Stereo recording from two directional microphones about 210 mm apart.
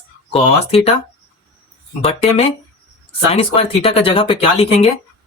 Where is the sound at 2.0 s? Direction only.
30° left (ahead or behind).